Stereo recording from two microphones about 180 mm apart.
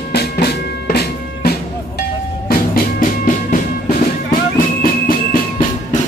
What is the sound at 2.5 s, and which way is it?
Music, 50° left (ahead or behind).